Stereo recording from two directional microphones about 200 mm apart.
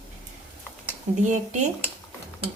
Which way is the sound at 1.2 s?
35° right (ahead or behind).